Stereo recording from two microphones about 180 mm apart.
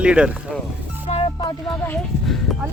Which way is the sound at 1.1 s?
35° left (ahead or behind).